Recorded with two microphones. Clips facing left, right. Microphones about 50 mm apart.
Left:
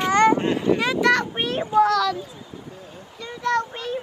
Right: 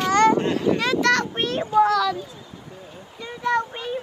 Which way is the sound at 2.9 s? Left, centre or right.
Centre.